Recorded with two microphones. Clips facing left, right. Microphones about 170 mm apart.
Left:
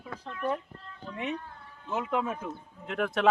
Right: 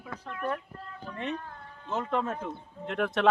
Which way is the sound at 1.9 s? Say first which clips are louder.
Even; 10° left (ahead or behind).